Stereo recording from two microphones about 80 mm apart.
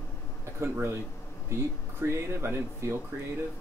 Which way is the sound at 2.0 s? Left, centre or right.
Right.